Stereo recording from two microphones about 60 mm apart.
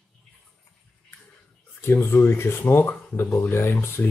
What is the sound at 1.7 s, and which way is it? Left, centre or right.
Speech, left.